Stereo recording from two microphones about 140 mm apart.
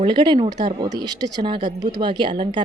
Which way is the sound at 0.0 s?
35° right (ahead or behind).